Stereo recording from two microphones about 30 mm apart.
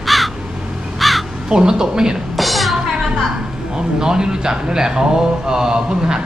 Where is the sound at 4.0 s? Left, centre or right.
Right.